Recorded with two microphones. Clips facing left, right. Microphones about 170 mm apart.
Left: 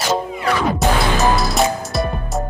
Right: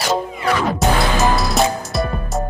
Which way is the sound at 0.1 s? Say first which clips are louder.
Even; centre (ahead or behind).